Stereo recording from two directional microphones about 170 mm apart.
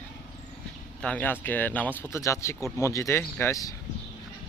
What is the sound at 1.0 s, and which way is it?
Speech, 5° left (ahead or behind).